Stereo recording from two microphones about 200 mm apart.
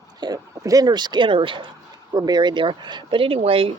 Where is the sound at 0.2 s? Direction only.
20° right (ahead or behind).